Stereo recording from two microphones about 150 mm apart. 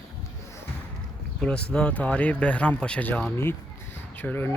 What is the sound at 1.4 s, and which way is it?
Speech, 5° left (ahead or behind).